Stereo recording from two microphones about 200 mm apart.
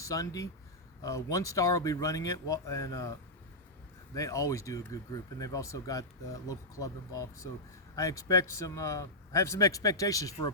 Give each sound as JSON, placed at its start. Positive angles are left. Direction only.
{"t": 0.0, "sound": "speech", "side_deg": 15}